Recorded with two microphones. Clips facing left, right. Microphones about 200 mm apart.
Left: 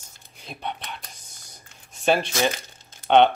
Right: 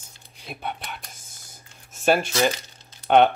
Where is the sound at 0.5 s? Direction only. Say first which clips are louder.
Even; 5° right (ahead or behind).